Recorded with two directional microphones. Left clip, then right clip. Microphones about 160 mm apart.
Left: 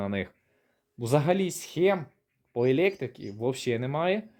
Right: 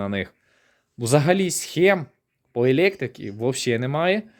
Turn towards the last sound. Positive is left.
turn(degrees=-30)  # may be behind; listen again after turning